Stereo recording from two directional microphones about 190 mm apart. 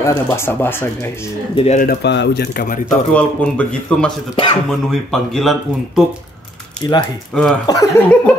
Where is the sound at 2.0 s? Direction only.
65° left (ahead or behind).